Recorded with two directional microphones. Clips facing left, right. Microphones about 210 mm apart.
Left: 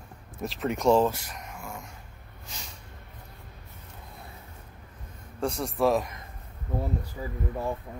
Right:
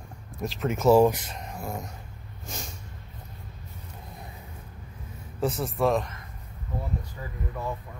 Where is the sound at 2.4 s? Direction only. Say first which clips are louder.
Right 7 dB; 45° right (ahead or behind).